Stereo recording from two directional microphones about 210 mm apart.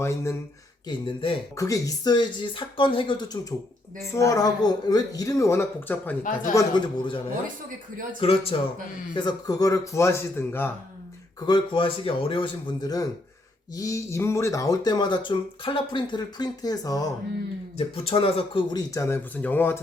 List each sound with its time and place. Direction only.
0.0 s speech: 10° left (ahead or behind)
0.9 s speech: 25° left (ahead or behind)
3.5 s speech: 10° left (ahead or behind)
8.2 s speech: 25° left (ahead or behind)
17.7 s speech: 30° left (ahead or behind); by 19.8 s 10° left (ahead or behind)